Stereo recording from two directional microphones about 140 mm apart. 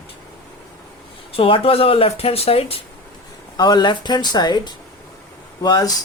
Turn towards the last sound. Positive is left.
turn(degrees=30)  # may be behind; listen again after turning